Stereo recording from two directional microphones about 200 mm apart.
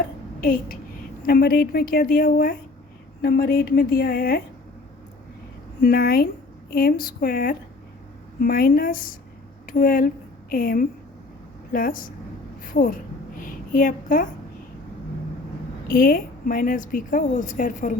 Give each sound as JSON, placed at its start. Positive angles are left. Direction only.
{"t": 1.3, "sound": "a woman's voice", "side_deg": 50}
{"t": 5.8, "sound": "a woman's voice", "side_deg": 50}
{"t": 13.4, "sound": "a sound", "side_deg": 40}
{"t": 15.9, "sound": "a woman's voice", "side_deg": 45}